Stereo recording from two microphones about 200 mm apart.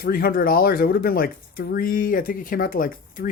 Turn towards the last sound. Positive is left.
turn(degrees=45)  # may be behind; listen again after turning